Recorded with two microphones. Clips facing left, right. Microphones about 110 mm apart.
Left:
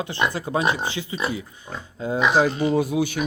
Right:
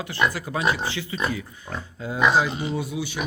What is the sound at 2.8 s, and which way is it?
Speech, 50° left (ahead or behind).